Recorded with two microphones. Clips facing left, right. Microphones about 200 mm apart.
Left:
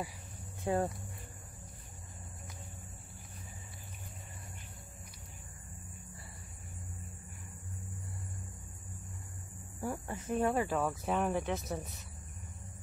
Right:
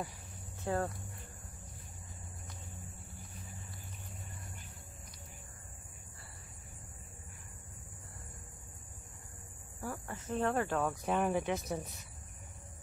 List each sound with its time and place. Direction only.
0.7 s speech: 15° left (ahead or behind)
9.8 s speech: 20° left (ahead or behind); by 11.8 s centre (ahead or behind)